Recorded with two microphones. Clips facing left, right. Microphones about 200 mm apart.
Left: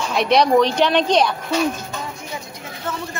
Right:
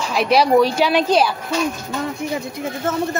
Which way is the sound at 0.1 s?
5° right (ahead or behind).